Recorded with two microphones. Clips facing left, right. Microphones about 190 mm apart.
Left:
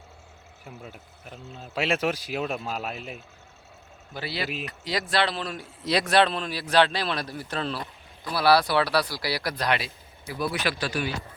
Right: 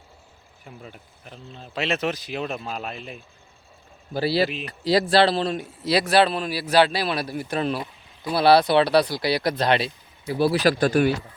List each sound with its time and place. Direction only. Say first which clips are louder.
0.6 s speech: even; 5° left (ahead or behind)
4.1 s speech: right 10 dB; 35° right (ahead or behind)
5.8 s speech: right 3 dB; 5° right (ahead or behind); by 10.8 s 35° right (ahead or behind)
10.8 s speech: right 10 dB; 50° right (ahead or behind)